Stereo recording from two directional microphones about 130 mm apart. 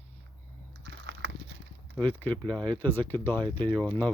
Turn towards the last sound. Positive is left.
turn(degrees=15)  # may be behind; listen again after turning